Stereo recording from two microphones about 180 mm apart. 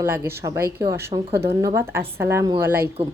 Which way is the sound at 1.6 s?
15° right (ahead or behind).